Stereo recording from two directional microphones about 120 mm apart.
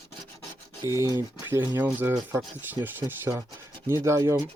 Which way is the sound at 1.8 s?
20° right (ahead or behind).